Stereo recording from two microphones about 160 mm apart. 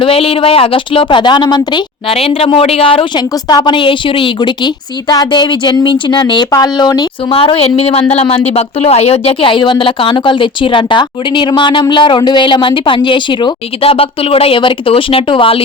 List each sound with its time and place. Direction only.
0.0 s a woman's voice: 35° left (ahead or behind)
7.3 s speech: 35° left (ahead or behind)